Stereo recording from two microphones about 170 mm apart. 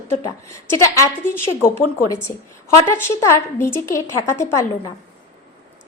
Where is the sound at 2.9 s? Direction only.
15° left (ahead or behind).